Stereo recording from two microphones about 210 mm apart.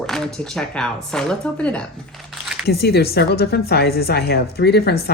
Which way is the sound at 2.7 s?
50° left (ahead or behind).